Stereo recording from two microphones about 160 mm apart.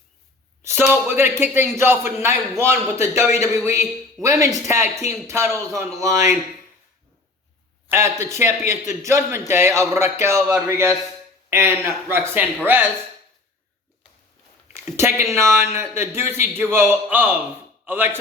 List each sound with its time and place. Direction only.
0.6 s a sound: 15° right (ahead or behind)
1.0 s a man's voice: 15° right (ahead or behind)
7.9 s a man's voice: 15° right (ahead or behind)
14.7 s a man's voice: 15° right (ahead or behind)